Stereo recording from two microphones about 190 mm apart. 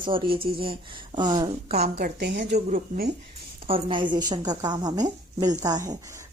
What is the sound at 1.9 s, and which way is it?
Speech, 60° right (ahead or behind).